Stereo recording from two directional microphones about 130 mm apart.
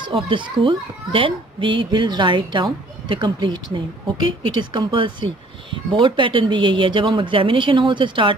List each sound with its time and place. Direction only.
0.0 s a child's voice: 40° right (ahead or behind)